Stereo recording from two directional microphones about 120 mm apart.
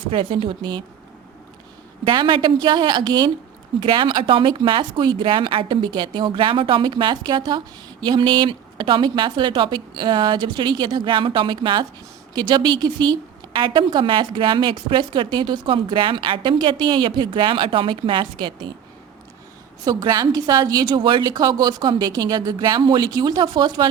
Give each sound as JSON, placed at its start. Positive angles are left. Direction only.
{"t": 0.1, "sound": "a woman's voice", "side_deg": -45}
{"t": 2.0, "sound": "a woman's voice", "side_deg": -45}
{"t": 19.8, "sound": "a woman's voice", "side_deg": -35}